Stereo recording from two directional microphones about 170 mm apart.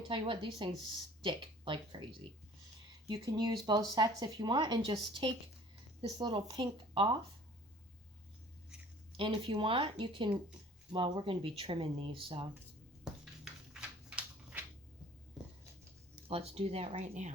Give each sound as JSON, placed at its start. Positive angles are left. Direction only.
{"t": 0.1, "sound": "speech", "side_deg": -30}
{"t": 3.1, "sound": "speech", "side_deg": -25}
{"t": 9.1, "sound": "speech", "side_deg": -30}
{"t": 13.4, "sound": "a sound", "side_deg": -5}
{"t": 16.1, "sound": "speech", "side_deg": -35}